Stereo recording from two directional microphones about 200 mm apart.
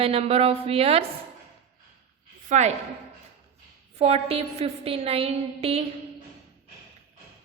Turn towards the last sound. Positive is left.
turn(degrees=-30)  # may be behind; listen again after turning